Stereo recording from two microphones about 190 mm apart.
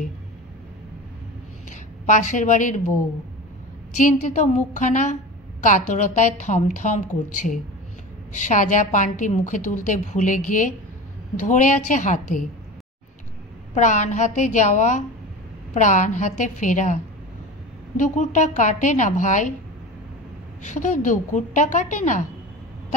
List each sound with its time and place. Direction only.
1.7 s a woman's voice: 40° left (ahead or behind)
3.9 s a woman's voice: 40° left (ahead or behind)
8.3 s a woman's voice: 40° left (ahead or behind)
13.7 s a woman's voice: 40° left (ahead or behind)
20.6 s a woman's voice: 40° left (ahead or behind)